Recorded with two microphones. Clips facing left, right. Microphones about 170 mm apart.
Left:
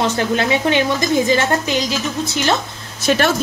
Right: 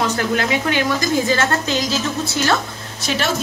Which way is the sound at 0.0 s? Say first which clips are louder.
Left 2 dB; 25° left (ahead or behind).